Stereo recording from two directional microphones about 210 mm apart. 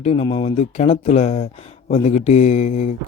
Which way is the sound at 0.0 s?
30° left (ahead or behind).